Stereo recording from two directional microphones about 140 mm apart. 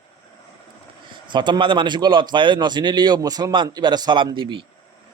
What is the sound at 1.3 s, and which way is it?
A man's voice, 35° right (ahead or behind).